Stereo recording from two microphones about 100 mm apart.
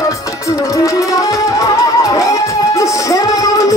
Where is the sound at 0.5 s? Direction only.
35° left (ahead or behind).